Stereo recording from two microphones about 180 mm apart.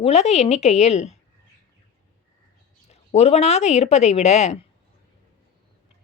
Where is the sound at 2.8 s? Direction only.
35° left (ahead or behind).